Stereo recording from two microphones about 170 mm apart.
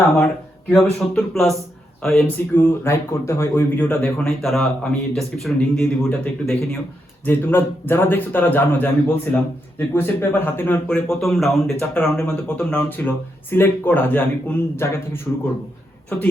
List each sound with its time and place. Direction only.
0.9 s a man's voice: centre (ahead or behind)